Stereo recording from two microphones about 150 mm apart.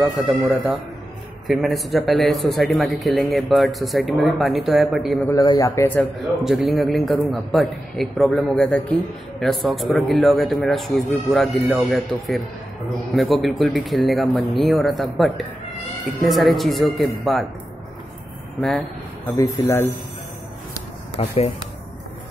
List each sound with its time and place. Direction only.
0.0 s a man's voice: centre (ahead or behind)
5.3 s a man's voice: 25° left (ahead or behind)
6.4 s a man's voice: centre (ahead or behind)
18.6 s speech: 5° left (ahead or behind)
19.3 s a man's voice: 20° left (ahead or behind)